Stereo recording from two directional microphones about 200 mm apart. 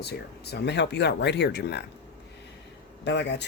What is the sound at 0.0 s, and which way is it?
Speech, 55° left (ahead or behind).